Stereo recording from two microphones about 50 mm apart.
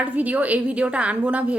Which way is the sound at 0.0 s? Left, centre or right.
Right.